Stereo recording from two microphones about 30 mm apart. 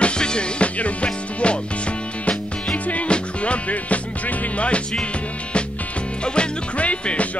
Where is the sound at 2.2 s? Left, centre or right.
Left.